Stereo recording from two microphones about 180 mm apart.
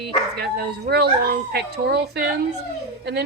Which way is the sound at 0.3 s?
65° right (ahead or behind).